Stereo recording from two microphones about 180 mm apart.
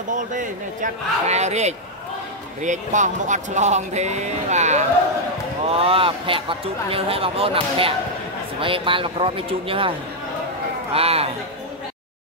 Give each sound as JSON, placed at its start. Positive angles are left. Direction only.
{"t": 0.1, "sound": "speech", "side_deg": -45}